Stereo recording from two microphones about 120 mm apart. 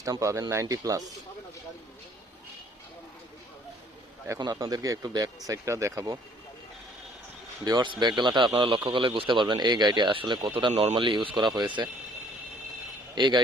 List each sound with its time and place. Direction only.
0.0 s speech: 25° right (ahead or behind)
4.4 s speech: 35° right (ahead or behind)
7.6 s speech: 35° right (ahead or behind)
13.1 s speech: 40° right (ahead or behind)